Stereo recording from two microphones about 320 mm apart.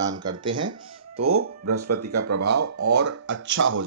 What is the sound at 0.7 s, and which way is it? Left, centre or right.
Speech, right.